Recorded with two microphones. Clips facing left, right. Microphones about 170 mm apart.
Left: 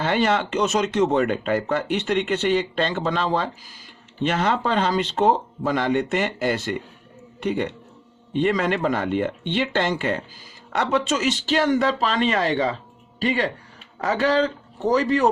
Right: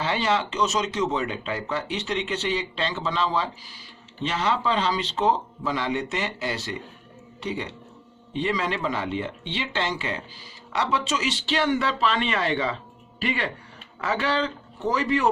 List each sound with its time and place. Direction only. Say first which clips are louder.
0.0 s a man's voice: left 4 dB; 55° left (ahead or behind)